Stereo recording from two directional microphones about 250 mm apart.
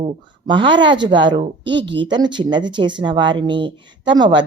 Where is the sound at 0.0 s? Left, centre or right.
Centre.